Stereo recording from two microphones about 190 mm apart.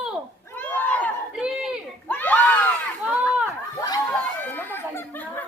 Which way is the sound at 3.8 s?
20° left (ahead or behind).